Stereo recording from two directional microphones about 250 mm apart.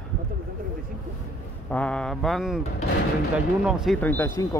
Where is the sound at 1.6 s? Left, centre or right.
Centre.